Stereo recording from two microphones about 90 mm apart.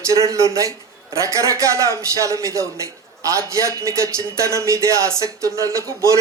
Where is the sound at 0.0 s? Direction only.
35° right (ahead or behind).